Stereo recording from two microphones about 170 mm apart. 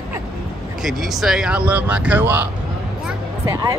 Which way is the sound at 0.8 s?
Centre (ahead or behind).